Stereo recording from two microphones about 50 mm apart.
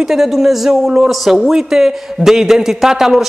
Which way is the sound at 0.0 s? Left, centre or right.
Centre.